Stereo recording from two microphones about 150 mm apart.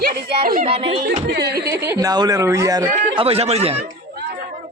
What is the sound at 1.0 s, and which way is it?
Music, 85° right.